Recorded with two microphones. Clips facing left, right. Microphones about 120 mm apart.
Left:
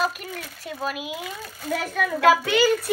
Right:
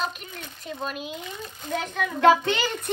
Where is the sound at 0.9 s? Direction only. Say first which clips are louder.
Left 2 dB; 5° left (ahead or behind).